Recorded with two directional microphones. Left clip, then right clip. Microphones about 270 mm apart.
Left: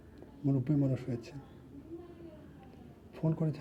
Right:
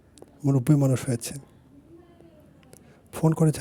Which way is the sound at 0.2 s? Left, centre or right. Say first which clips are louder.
Right 8 dB; right.